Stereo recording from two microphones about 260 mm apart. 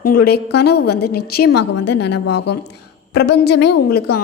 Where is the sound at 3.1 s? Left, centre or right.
Left.